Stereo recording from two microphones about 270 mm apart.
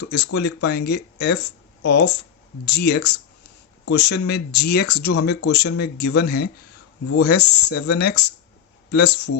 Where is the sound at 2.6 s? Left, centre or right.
Left.